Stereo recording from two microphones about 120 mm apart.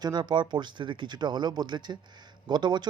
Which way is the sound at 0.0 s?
35° right (ahead or behind).